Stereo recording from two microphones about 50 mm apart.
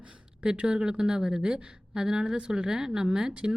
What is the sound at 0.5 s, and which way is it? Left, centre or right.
Speech, centre.